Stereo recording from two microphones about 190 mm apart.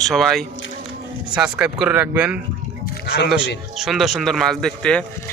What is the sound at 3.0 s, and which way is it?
Speech, 55° left (ahead or behind).